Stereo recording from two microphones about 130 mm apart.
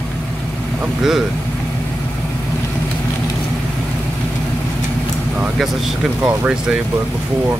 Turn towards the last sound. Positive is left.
turn(degrees=-10)  # may be behind; listen again after turning